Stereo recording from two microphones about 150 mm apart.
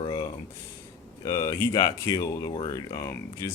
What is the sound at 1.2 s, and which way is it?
Speech, 20° left (ahead or behind).